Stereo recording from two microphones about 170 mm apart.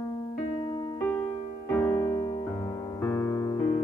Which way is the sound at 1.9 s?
25° left (ahead or behind).